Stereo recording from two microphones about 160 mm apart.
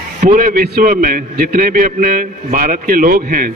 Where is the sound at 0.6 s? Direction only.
65° right (ahead or behind).